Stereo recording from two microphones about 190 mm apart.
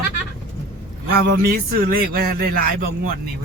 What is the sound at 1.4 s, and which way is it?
Speech, 50° right (ahead or behind).